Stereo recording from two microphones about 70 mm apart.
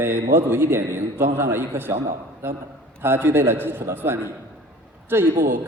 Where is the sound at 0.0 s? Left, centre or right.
Right.